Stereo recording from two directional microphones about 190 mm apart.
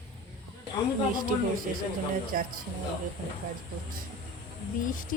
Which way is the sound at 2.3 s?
45° right (ahead or behind).